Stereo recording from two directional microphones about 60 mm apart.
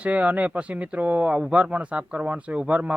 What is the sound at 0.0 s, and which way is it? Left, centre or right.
Speech, right.